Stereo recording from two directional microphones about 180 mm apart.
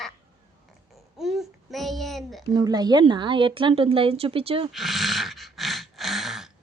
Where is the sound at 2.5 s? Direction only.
20° right (ahead or behind).